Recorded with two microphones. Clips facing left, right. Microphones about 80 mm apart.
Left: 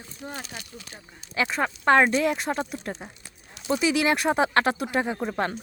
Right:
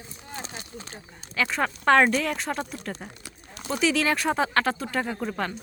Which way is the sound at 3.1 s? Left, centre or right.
Right.